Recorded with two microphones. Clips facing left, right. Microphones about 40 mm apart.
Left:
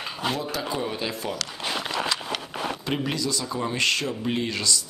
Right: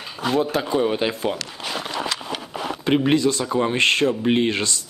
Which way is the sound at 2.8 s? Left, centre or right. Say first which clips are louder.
Right 12 dB; right.